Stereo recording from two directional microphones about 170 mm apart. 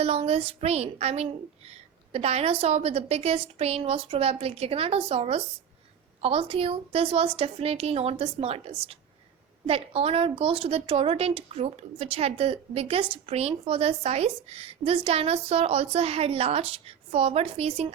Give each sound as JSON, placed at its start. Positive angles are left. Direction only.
{"t": 0.0, "sound": "a woman's voice", "side_deg": -35}